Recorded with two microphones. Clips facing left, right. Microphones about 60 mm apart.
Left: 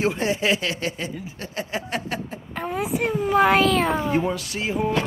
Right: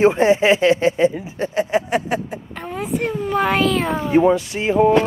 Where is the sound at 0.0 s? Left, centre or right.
Right.